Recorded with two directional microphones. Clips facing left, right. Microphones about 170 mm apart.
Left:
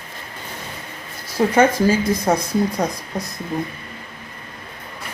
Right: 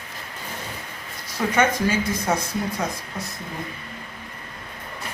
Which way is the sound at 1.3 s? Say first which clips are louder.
Left 6 dB; 30° left (ahead or behind).